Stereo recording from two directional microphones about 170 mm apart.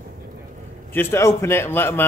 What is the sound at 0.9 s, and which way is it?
Speech, 15° left (ahead or behind).